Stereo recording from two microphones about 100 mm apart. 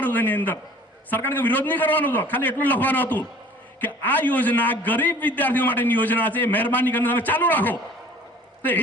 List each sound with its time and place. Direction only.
0.0 s a man's voice: 20° left (ahead or behind)